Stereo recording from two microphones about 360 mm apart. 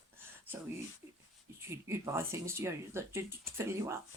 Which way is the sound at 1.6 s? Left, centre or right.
Centre.